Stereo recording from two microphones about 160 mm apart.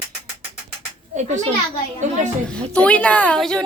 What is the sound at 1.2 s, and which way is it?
Speech, 45° right (ahead or behind).